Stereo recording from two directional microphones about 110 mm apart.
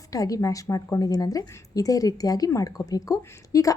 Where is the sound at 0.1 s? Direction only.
30° left (ahead or behind).